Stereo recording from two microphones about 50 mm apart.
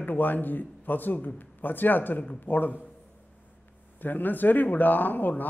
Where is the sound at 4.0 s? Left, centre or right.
Left.